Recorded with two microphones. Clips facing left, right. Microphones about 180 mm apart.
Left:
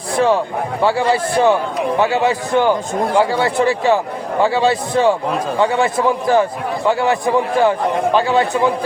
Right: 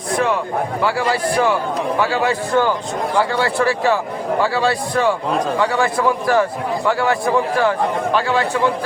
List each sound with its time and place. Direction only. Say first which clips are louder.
0.1 s a man's voice: left 3 dB; 30° left (ahead or behind)